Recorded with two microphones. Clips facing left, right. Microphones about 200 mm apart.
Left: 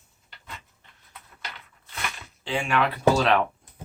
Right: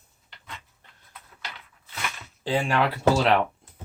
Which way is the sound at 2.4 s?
35° right (ahead or behind).